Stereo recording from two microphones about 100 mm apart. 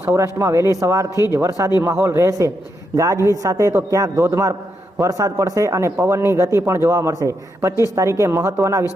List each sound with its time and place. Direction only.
0.1 s speech: 30° right (ahead or behind)